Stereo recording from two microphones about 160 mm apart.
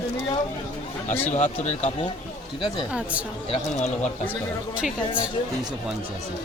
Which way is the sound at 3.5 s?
45° left (ahead or behind).